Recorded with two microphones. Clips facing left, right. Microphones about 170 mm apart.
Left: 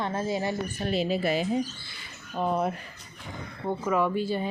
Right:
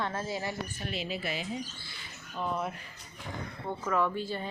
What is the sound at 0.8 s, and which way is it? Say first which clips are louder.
Speech: left 12 dB; 40° left (ahead or behind).